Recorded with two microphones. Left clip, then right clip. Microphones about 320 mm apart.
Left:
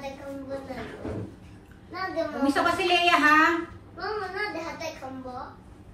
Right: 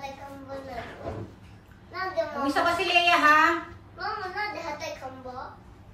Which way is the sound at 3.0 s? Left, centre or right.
Centre.